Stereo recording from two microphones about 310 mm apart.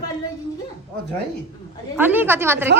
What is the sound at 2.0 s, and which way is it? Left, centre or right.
Speech, centre.